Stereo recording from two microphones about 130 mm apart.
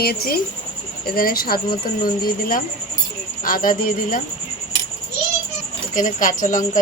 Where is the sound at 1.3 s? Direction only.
90° left.